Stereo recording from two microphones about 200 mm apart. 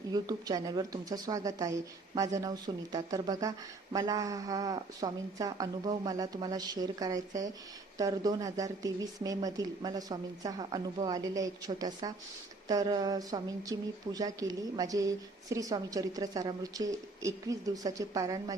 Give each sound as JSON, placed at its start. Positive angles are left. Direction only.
{"t": 0.1, "sound": "speech", "side_deg": -20}